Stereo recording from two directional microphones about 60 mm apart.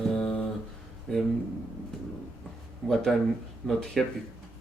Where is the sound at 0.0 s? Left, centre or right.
Centre.